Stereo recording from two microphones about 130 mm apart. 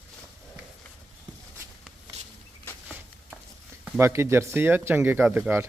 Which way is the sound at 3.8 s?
20° right (ahead or behind).